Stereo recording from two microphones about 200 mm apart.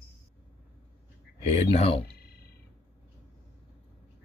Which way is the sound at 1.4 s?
30° left (ahead or behind).